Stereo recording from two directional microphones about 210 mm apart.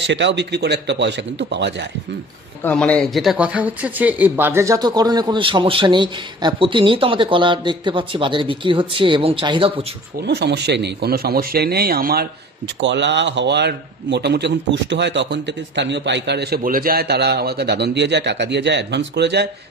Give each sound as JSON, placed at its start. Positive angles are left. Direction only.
{"t": 0.0, "sound": "a man's voice", "side_deg": -55}
{"t": 2.6, "sound": "speech", "side_deg": 5}
{"t": 10.2, "sound": "speech", "side_deg": -55}
{"t": 12.8, "sound": "a man's voice", "side_deg": -55}